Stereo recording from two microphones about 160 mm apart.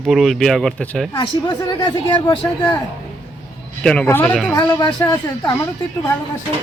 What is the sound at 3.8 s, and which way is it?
Speech, 10° left (ahead or behind).